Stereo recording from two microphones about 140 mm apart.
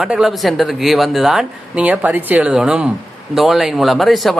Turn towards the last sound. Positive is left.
turn(degrees=0)  # may be behind; listen again after turning